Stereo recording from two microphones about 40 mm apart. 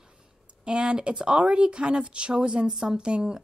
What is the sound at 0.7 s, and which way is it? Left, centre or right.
Speech, right.